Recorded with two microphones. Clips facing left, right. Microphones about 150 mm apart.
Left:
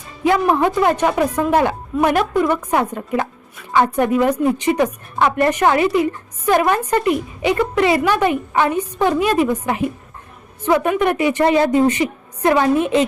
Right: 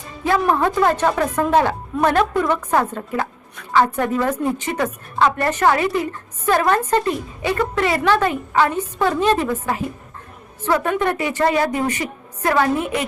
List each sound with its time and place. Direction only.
0.4 s a woman's voice: 15° left (ahead or behind)